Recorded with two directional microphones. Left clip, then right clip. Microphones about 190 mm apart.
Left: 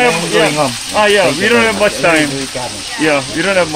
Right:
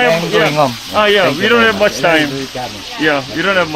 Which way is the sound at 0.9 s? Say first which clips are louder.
Left 1 dB; 20° right (ahead or behind).